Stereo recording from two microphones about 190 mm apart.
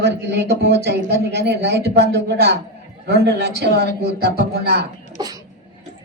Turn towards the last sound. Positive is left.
turn(degrees=-20)  # may be behind; listen again after turning